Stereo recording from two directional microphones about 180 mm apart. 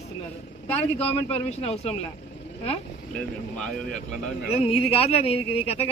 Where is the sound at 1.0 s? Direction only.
35° left (ahead or behind).